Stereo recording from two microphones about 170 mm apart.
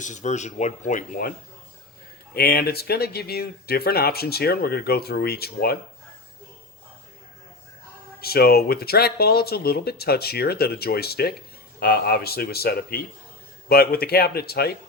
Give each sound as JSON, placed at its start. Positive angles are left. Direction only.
{"t": 0.0, "sound": "speech", "side_deg": 45}
{"t": 2.3, "sound": "speech", "side_deg": 65}
{"t": 8.2, "sound": "speech", "side_deg": 65}